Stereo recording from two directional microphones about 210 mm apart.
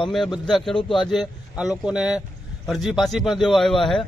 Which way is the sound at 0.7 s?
25° left (ahead or behind).